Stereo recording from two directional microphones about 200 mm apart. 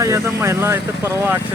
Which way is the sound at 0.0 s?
15° right (ahead or behind).